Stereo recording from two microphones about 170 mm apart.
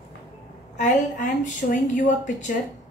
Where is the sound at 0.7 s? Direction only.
45° left (ahead or behind).